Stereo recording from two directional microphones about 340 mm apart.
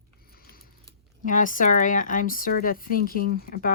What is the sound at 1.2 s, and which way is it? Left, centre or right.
Speech, left.